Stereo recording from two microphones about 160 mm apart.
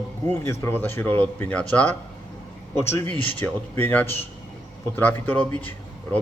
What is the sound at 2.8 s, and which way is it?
A man's voice, 15° left (ahead or behind).